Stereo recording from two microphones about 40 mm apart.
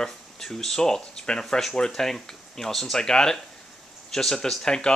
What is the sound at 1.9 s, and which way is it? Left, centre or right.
Speech, centre.